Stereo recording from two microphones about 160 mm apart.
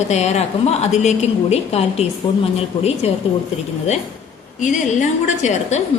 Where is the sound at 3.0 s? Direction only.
40° left (ahead or behind).